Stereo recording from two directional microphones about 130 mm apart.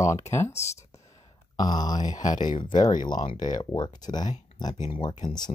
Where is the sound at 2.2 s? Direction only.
30° left (ahead or behind).